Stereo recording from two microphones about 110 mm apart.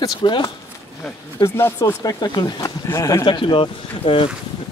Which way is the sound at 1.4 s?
25° left (ahead or behind).